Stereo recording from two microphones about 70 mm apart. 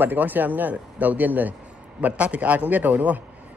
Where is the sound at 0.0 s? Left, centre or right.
Right.